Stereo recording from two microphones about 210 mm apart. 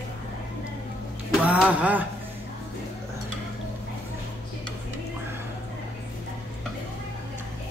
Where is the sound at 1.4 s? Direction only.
5° right (ahead or behind).